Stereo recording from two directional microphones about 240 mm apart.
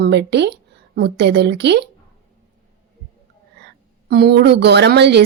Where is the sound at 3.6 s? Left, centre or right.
Right.